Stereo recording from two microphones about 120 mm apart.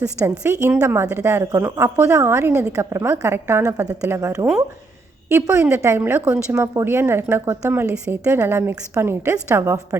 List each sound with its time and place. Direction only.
0.3 s a woman's voice: 20° right (ahead or behind)